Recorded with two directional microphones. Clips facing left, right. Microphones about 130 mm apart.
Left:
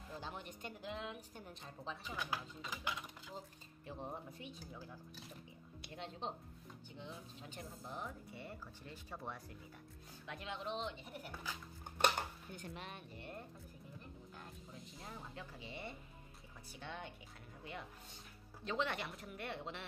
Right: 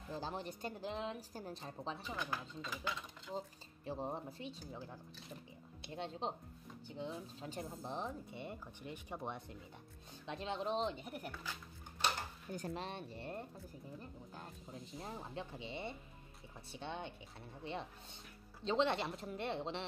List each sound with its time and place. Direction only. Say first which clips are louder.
0.1 s speech: right 6 dB; 35° right (ahead or behind)
2.1 s speech: right 1 dB; 10° left (ahead or behind)
3.3 s speech: right 6 dB; 30° right (ahead or behind)
5.8 s speech: right 4 dB; 25° right (ahead or behind)
12.4 s speech: right 6 dB; 40° right (ahead or behind)
15.0 s speech: right 6 dB; 30° right (ahead or behind)